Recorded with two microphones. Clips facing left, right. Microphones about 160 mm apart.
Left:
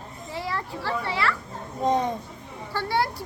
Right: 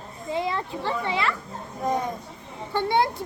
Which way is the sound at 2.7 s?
20° right (ahead or behind).